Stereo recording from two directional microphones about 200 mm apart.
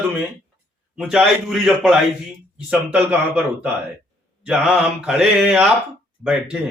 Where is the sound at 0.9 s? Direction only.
5° right (ahead or behind).